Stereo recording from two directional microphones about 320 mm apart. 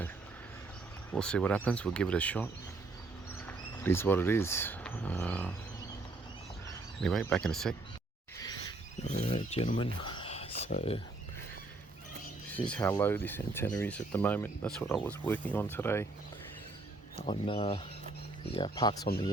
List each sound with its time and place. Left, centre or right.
1.1 s speech: centre
7.0 s speech: centre
8.4 s a sound: centre
9.0 s speech: left
12.5 s speech: centre
17.2 s speech: centre